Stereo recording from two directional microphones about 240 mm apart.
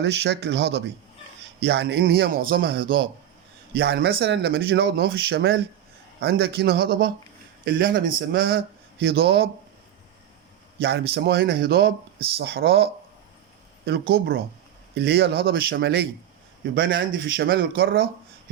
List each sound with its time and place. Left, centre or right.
0.0 s a man's voice: right
10.8 s a man's voice: right